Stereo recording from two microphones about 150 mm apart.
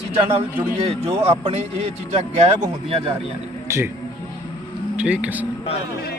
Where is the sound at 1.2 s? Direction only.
45° right (ahead or behind).